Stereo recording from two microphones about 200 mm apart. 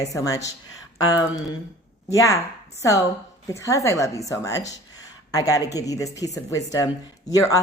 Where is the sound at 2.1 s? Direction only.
15° left (ahead or behind).